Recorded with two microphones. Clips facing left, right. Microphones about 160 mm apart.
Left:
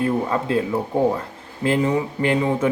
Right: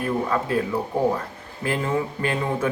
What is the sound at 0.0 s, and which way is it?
Speech, 25° left (ahead or behind).